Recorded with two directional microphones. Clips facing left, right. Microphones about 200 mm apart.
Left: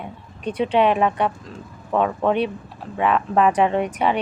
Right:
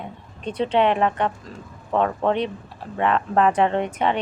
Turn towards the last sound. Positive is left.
turn(degrees=10)  # may be behind; listen again after turning